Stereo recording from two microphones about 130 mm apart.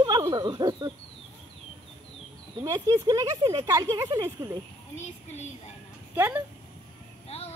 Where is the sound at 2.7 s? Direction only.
25° right (ahead or behind).